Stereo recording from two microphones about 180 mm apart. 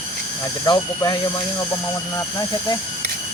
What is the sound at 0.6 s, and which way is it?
Speech, 25° left (ahead or behind).